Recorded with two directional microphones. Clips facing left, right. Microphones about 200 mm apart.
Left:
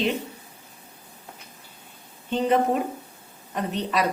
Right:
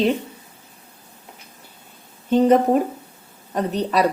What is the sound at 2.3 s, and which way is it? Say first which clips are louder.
A woman's voice: right 7 dB; 40° right (ahead or behind).